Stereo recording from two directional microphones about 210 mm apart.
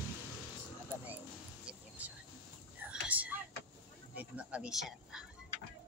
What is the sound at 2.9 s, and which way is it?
Whispering, 5° right (ahead or behind).